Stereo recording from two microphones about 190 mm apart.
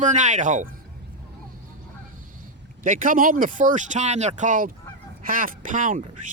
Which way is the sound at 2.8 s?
45° right (ahead or behind).